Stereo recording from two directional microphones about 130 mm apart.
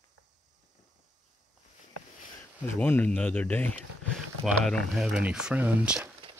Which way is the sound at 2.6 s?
15° left (ahead or behind).